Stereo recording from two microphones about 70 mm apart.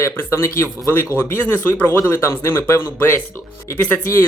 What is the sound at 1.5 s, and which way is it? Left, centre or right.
Speech, left.